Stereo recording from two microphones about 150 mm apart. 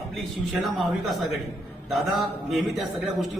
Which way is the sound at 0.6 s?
Centre (ahead or behind).